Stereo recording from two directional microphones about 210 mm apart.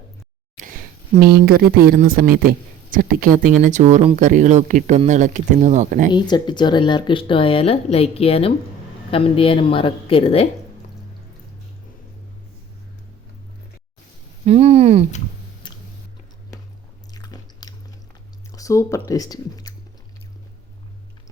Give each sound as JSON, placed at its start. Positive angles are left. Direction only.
{"t": 1.2, "sound": "a woman's voice", "side_deg": -45}
{"t": 6.1, "sound": "speech", "side_deg": 20}
{"t": 14.4, "sound": "a woman's voice", "side_deg": -30}
{"t": 15.6, "sound": "biting", "side_deg": 20}
{"t": 17.2, "sound": "chewing", "side_deg": 20}
{"t": 18.5, "sound": "speech", "side_deg": 15}